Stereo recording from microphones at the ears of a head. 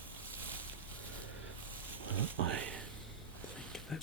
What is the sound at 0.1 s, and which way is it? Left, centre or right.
Boat, right.